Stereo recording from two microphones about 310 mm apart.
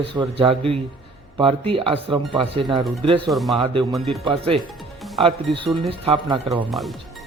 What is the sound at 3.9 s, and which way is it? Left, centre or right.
Speech, centre.